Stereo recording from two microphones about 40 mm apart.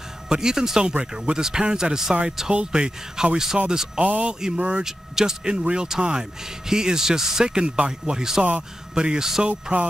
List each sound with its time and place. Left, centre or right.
0.3 s a man's voice: centre
4.0 s a man's voice: right
4.3 s a man's voice: centre
7.4 s speech: right
8.2 s a man's voice: centre